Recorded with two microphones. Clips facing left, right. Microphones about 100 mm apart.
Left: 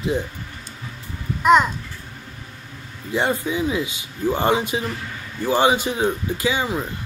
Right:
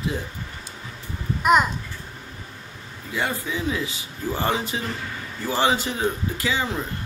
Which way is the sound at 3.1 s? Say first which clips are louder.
Left 5 dB; 25° left (ahead or behind).